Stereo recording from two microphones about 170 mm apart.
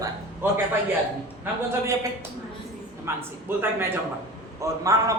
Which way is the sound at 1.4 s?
15° right (ahead or behind).